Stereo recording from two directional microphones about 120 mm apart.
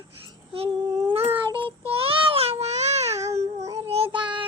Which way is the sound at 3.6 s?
55° right (ahead or behind).